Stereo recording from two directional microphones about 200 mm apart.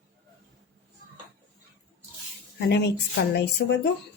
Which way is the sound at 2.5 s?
60° left (ahead or behind).